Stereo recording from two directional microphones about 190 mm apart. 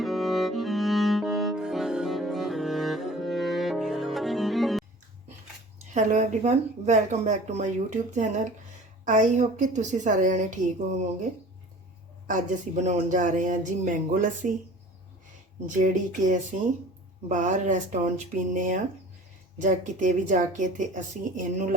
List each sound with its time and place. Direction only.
0.0 s music: centre (ahead or behind)
5.9 s speech: 40° right (ahead or behind)
12.3 s speech: 40° right (ahead or behind)
15.6 s speech: 40° right (ahead or behind)